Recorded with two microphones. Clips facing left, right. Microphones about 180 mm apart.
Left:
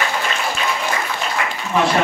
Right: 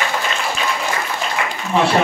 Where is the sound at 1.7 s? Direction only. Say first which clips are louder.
Right 1 dB; 30° right (ahead or behind).